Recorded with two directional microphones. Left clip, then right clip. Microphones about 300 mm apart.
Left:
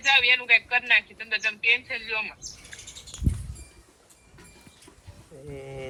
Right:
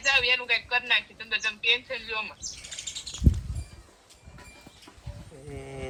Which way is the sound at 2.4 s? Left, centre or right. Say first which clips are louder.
Right 3 dB; left.